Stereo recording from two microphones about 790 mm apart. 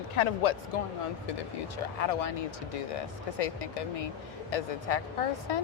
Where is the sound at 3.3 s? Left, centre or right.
Left.